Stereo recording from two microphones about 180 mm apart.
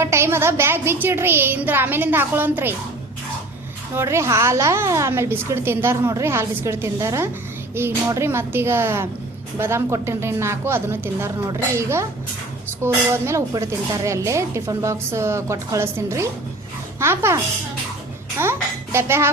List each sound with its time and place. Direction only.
0.0 s speech: 15° right (ahead or behind)
3.9 s a woman's voice: 15° right (ahead or behind)